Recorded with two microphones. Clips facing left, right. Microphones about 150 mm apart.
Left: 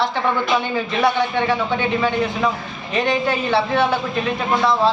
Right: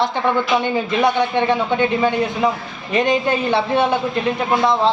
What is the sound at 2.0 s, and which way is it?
A woman's voice, 15° right (ahead or behind).